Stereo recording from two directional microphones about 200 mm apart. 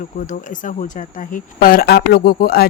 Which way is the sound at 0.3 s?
40° left (ahead or behind).